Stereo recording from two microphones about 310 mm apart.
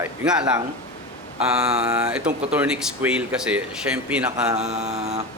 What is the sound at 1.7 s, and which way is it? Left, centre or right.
Speech, centre.